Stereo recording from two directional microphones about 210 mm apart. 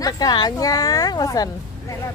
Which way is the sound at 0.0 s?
20° left (ahead or behind).